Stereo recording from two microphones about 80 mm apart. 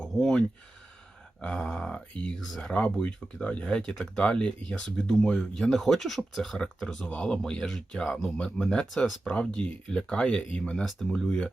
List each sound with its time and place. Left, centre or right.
0.0 s speech: centre
2.7 s speech: centre